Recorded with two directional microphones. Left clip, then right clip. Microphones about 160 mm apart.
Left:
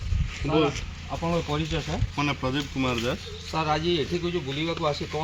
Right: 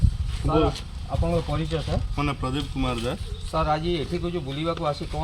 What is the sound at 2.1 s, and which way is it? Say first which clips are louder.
Speech: left 2 dB; 50° right (ahead or behind).